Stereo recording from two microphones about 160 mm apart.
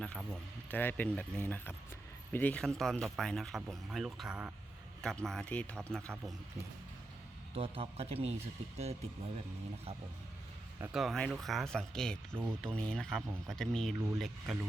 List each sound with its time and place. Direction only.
0.0 s speech: 5° left (ahead or behind)
7.5 s a man's voice: 35° right (ahead or behind)
10.9 s speech: centre (ahead or behind)